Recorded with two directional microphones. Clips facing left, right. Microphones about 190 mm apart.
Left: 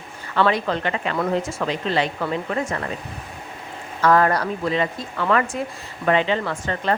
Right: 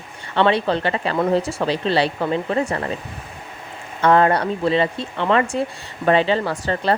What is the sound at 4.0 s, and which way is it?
Speech, 25° right (ahead or behind).